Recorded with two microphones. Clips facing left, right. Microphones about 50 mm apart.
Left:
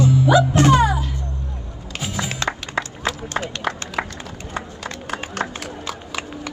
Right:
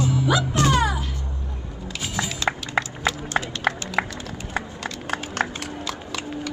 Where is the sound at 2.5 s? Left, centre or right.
Centre.